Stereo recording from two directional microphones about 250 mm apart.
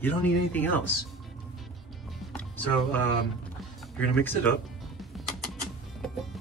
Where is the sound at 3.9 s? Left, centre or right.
Centre.